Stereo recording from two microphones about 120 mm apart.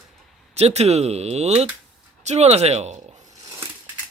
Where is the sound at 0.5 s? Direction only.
60° right (ahead or behind).